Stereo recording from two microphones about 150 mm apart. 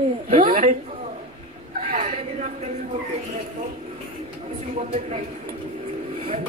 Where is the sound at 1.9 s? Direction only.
50° right (ahead or behind).